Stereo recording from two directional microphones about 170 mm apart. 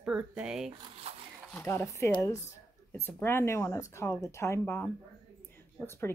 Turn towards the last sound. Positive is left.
turn(degrees=15)  # may be behind; listen again after turning